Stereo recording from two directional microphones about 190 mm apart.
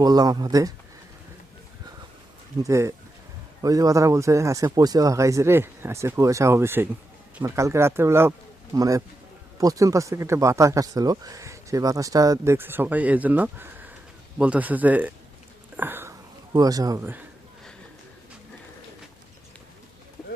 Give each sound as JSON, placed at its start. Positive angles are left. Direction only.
{"t": 0.0, "sound": "speech", "side_deg": -20}
{"t": 2.6, "sound": "speech", "side_deg": -15}
{"t": 15.8, "sound": "a sound", "side_deg": -10}